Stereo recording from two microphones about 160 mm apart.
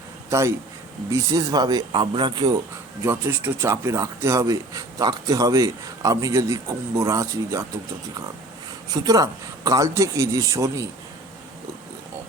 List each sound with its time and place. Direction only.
0.3 s speech: 15° right (ahead or behind)
3.0 s speech: 15° right (ahead or behind)
8.9 s speech: 25° right (ahead or behind)